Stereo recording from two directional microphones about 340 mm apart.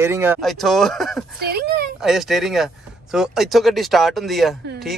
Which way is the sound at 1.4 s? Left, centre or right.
Right.